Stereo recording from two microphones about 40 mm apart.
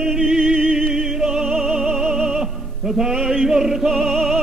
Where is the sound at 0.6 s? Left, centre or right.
Centre.